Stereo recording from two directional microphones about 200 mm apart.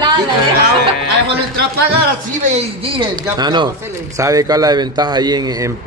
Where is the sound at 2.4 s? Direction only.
30° right (ahead or behind).